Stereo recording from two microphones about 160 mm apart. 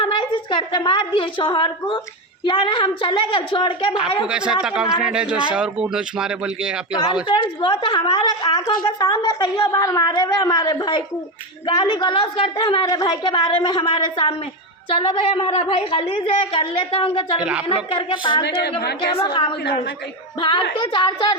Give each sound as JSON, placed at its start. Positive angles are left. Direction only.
{"t": 0.0, "sound": "a woman's voice", "side_deg": 30}
{"t": 3.9, "sound": "a woman's voice", "side_deg": -5}
{"t": 7.3, "sound": "a woman's voice", "side_deg": 30}
{"t": 18.8, "sound": "a woman's voice", "side_deg": 90}
{"t": 19.1, "sound": "a woman's voice", "side_deg": 20}
{"t": 20.4, "sound": "a woman's voice", "side_deg": 30}